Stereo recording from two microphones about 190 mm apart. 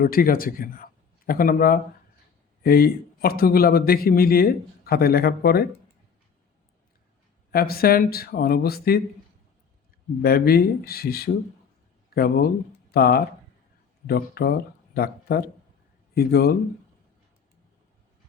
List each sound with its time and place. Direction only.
0.0 s a man's voice: 50° left (ahead or behind)
7.5 s a man's voice: 55° left (ahead or behind)
10.2 s a man's voice: 55° left (ahead or behind)